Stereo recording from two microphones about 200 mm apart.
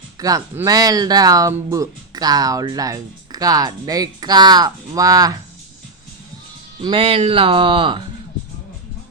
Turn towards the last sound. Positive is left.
turn(degrees=-25)  # may be behind; listen again after turning